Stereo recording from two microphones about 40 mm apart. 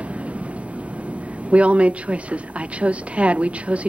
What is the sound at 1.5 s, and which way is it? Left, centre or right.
A woman's voice, right.